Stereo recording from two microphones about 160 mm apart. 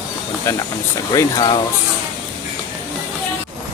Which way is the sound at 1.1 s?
25° left (ahead or behind).